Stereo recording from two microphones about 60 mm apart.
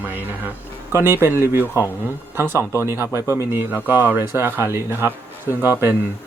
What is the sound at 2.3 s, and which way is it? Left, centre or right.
Speech, right.